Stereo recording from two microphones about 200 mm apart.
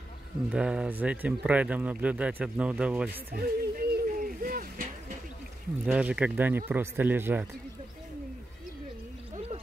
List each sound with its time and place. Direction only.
0.5 s speech: 5° right (ahead or behind)
3.3 s a sound: 50° right (ahead or behind)
5.9 s speech: 5° right (ahead or behind)